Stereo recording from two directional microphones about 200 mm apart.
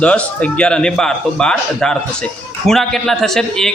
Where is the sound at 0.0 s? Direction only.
5° left (ahead or behind).